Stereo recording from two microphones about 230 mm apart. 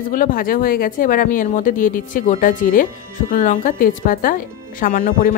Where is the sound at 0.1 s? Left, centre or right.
Left.